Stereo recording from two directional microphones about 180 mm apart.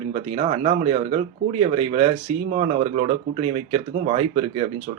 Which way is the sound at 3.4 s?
30° right (ahead or behind).